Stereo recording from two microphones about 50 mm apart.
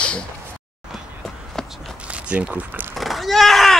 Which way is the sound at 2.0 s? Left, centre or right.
Right.